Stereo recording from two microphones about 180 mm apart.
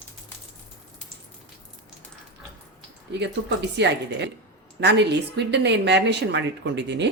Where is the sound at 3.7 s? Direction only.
75° right (ahead or behind).